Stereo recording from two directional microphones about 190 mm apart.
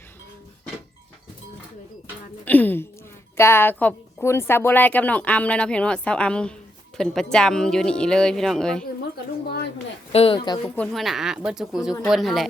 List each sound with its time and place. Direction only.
2.4 s a sound: 10° left (ahead or behind)
3.3 s a woman's voice: 15° left (ahead or behind)
10.1 s speech: 30° left (ahead or behind)
10.8 s speech: centre (ahead or behind)